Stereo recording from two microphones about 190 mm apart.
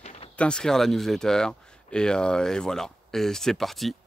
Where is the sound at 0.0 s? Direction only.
35° left (ahead or behind).